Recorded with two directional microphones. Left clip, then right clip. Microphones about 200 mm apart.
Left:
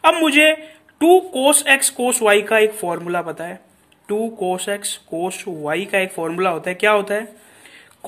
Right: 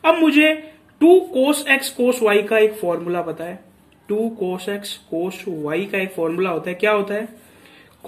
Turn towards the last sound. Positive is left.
turn(degrees=50)  # may be behind; listen again after turning